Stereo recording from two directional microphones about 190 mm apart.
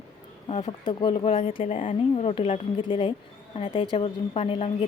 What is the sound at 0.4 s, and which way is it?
Speech, 25° left (ahead or behind).